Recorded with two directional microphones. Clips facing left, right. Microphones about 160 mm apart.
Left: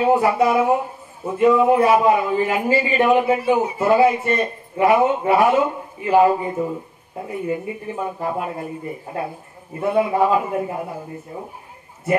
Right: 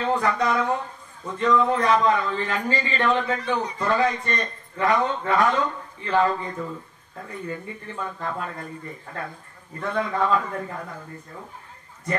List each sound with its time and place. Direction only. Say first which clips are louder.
0.0 s a man's voice: left 7 dB; 10° left (ahead or behind)